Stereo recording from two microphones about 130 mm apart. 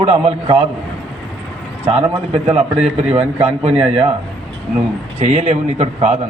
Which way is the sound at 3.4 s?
50° right (ahead or behind).